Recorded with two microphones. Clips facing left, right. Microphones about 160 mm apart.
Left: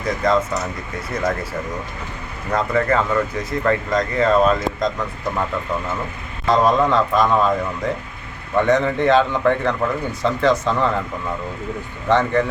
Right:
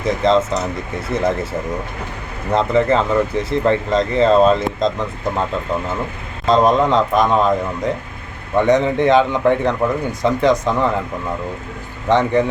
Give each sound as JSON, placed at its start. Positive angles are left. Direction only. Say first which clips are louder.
{"t": 0.0, "sound": "speech", "louder": "right 3 dB", "side_deg": -25}
{"t": 2.5, "sound": "speech", "louder": "right 4 dB", "side_deg": -25}
{"t": 8.5, "sound": "a man's voice", "louder": "right 3 dB", "side_deg": -20}
{"t": 12.0, "sound": "a man's voice", "louder": "right 2 dB", "side_deg": -15}